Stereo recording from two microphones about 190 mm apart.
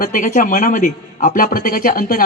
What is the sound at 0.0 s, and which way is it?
A man's voice, 45° left (ahead or behind).